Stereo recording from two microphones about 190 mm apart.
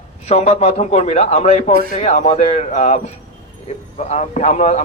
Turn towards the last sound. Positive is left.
turn(degrees=40)  # may be behind; listen again after turning